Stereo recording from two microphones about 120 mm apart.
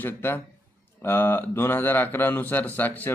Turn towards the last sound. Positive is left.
turn(degrees=15)  # may be behind; listen again after turning